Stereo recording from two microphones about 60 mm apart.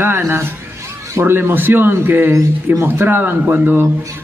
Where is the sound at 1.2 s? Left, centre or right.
Right.